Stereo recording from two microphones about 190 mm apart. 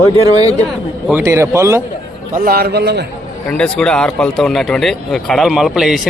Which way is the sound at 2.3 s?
50° right (ahead or behind).